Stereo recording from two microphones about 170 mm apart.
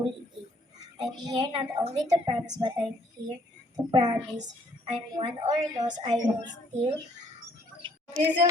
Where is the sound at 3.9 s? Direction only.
25° right (ahead or behind).